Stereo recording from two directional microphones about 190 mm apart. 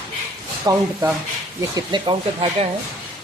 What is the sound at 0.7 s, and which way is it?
Speech, 20° right (ahead or behind).